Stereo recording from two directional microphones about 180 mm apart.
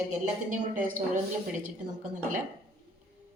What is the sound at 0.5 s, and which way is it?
Speech, 45° right (ahead or behind).